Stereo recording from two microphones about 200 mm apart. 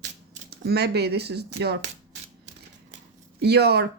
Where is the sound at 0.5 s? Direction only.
55° right (ahead or behind).